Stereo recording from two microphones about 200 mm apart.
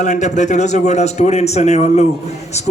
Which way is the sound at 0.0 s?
35° left (ahead or behind).